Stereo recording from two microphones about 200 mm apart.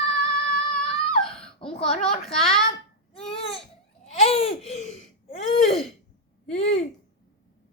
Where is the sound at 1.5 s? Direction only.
30° left (ahead or behind).